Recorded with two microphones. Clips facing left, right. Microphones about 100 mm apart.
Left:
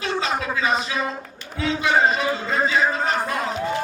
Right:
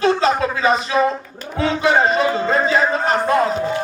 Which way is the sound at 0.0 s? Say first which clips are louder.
Right 8 dB; 40° right (ahead or behind).